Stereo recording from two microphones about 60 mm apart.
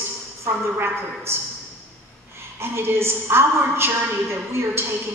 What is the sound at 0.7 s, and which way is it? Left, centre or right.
Speech, right.